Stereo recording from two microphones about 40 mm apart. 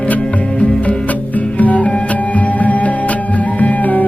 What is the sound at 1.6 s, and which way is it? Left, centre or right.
Music, left.